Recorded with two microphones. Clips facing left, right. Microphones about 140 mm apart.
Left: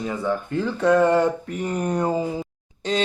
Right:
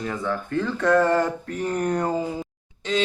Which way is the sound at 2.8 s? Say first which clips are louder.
Left 1 dB; 40° left (ahead or behind).